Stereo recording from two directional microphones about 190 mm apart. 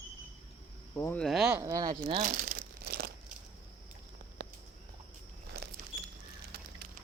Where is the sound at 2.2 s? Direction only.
45° right (ahead or behind).